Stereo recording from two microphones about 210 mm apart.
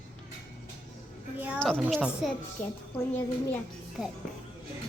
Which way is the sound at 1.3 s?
5° right (ahead or behind).